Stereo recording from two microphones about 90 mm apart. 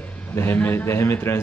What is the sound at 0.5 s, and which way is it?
Speech, 25° left (ahead or behind).